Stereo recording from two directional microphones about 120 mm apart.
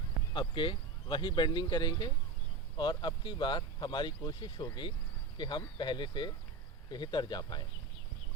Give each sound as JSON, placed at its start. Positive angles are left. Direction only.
{"t": 0.3, "sound": "speech", "side_deg": 40}